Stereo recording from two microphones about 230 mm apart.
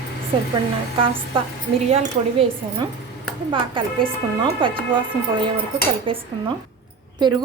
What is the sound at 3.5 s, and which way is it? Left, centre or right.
A woman's voice, right.